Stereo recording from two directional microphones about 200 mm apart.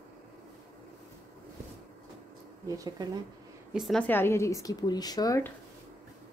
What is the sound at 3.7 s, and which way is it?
Speech, centre (ahead or behind).